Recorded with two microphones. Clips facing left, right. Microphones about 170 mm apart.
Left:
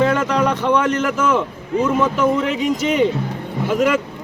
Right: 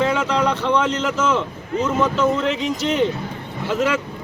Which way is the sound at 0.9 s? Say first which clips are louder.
Left 2 dB; 10° left (ahead or behind).